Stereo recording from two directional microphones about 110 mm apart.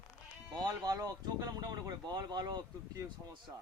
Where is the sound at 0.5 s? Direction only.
35° right (ahead or behind).